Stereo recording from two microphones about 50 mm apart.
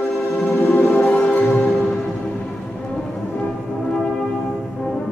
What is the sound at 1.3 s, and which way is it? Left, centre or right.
Music, left.